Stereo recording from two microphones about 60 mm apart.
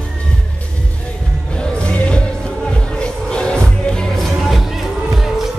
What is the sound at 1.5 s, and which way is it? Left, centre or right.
Music, centre.